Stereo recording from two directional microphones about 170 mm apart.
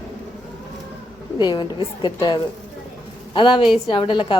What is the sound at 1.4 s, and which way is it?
A woman's voice, 25° left (ahead or behind).